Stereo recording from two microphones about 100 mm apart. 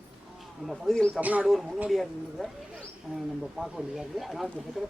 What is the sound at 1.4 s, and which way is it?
Speech, 5° right (ahead or behind).